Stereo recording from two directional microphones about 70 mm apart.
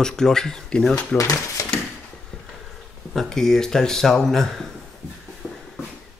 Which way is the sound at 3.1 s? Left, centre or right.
Centre.